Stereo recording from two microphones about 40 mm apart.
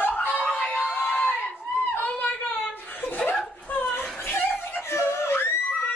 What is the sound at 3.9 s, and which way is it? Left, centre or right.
Screaming, left.